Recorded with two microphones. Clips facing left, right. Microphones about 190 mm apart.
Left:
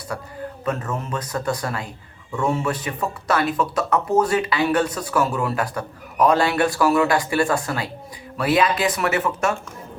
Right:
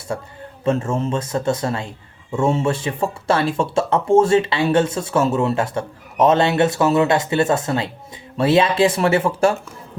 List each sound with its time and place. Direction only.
0.1 s speech: 25° right (ahead or behind)